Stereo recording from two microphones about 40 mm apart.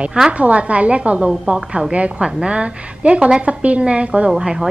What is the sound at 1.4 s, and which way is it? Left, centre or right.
A woman's voice, right.